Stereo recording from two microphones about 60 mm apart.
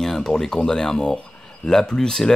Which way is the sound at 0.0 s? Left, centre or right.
Centre.